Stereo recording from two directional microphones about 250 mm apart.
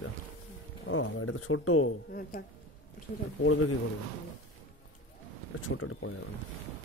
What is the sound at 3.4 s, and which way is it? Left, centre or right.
Speech, left.